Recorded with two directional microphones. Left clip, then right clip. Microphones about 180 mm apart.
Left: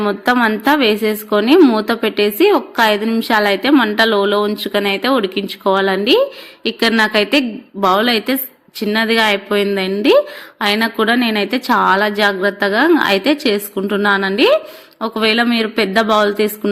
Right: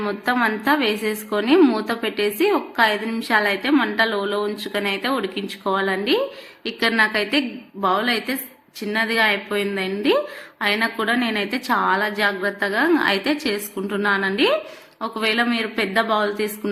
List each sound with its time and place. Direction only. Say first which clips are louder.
0.0 s a woman's voice: left 6 dB; 40° left (ahead or behind)